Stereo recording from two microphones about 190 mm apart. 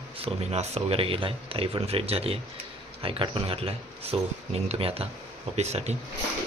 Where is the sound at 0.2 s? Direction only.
30° right (ahead or behind).